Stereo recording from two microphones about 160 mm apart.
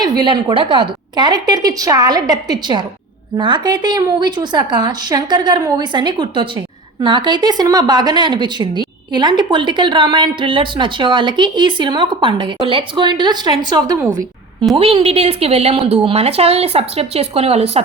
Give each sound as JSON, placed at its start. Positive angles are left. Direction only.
{"t": 0.0, "sound": "a woman's voice", "side_deg": -25}
{"t": 14.8, "sound": "a woman's voice", "side_deg": -35}